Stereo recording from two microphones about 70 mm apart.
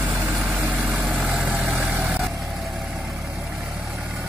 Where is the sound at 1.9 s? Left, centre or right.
Right.